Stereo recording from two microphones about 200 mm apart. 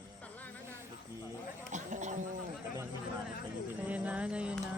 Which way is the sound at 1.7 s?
35° right (ahead or behind).